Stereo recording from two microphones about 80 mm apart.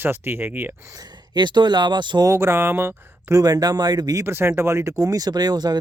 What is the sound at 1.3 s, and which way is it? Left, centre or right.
Speech, right.